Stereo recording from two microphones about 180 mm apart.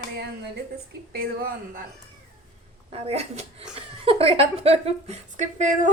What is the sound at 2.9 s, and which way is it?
A woman's voice, 35° right (ahead or behind).